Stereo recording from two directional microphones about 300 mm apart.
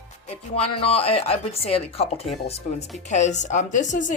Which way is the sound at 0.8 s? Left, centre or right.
Centre.